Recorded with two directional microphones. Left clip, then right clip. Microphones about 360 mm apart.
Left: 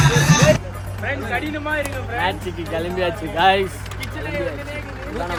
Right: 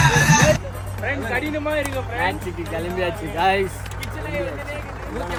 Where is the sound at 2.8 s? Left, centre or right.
Centre.